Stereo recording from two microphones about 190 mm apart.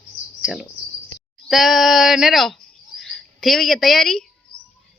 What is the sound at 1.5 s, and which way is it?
Speech, centre (ahead or behind).